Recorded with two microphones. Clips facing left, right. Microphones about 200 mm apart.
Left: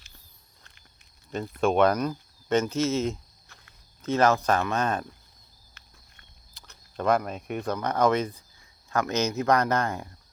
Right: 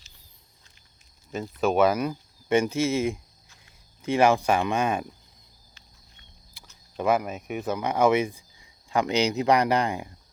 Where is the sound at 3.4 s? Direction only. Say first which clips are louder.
Left 2 dB; 60° left (ahead or behind).